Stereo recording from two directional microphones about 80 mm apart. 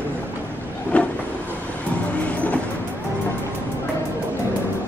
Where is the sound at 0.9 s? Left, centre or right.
Centre.